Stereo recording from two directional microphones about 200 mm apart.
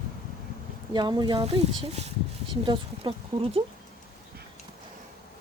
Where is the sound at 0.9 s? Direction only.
20° right (ahead or behind).